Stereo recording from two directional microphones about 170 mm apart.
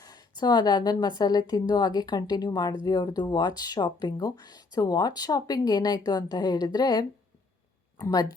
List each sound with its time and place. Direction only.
0.0 s speech: 20° left (ahead or behind)